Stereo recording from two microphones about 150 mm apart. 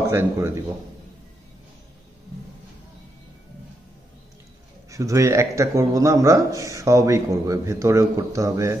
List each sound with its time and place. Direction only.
0.1 s a man's voice: 15° right (ahead or behind)
4.9 s a man's voice: 20° right (ahead or behind)